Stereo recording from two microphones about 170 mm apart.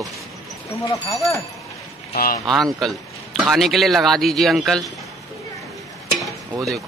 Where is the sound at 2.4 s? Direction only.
Centre (ahead or behind).